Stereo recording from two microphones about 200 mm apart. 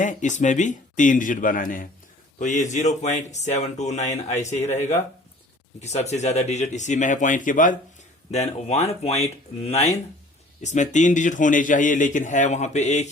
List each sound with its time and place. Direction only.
0.0 s a man's voice: 40° left (ahead or behind)